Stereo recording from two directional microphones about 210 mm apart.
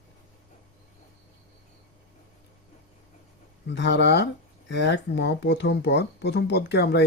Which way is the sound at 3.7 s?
55° left (ahead or behind).